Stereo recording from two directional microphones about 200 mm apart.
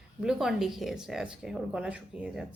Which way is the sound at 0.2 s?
Centre (ahead or behind).